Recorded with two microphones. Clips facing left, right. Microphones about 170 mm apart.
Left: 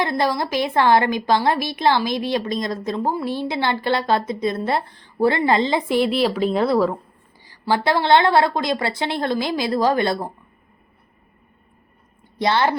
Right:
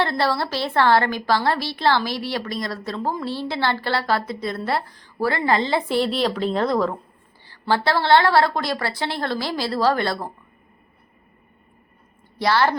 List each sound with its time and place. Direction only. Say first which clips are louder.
0.0 s a woman's voice: left 1 dB; 15° left (ahead or behind)
12.4 s a woman's voice: even; 20° left (ahead or behind)